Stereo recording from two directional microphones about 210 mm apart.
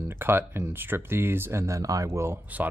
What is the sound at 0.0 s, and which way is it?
Speech, 10° right (ahead or behind).